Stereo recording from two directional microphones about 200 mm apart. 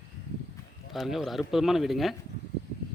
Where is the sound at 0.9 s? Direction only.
Centre (ahead or behind).